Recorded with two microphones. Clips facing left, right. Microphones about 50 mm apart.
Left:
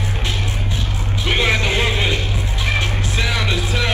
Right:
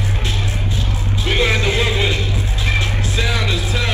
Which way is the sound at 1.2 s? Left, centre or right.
Left.